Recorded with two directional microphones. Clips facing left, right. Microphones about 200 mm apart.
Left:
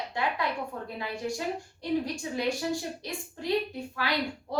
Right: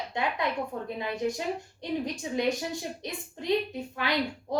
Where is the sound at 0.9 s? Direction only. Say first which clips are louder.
Right 5 dB; 20° right (ahead or behind).